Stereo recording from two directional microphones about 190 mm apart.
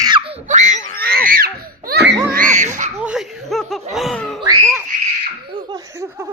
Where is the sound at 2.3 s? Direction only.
45° right (ahead or behind).